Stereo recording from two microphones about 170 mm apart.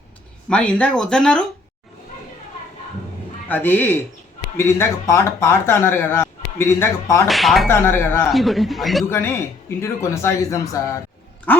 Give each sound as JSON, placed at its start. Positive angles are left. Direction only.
{"t": 0.5, "sound": "speech", "side_deg": 5}
{"t": 3.5, "sound": "a man's voice", "side_deg": 10}
{"t": 7.3, "sound": "speech", "side_deg": 0}
{"t": 7.7, "sound": "a man's voice", "side_deg": 15}
{"t": 8.3, "sound": "speech", "side_deg": 0}
{"t": 9.0, "sound": "a man's voice", "side_deg": 15}